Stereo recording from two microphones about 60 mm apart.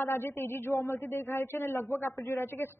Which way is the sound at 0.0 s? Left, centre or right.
Left.